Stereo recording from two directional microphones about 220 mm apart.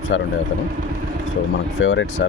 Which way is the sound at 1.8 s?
60° left (ahead or behind).